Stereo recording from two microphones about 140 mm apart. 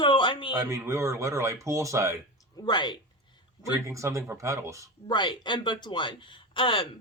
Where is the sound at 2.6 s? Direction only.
30° left (ahead or behind).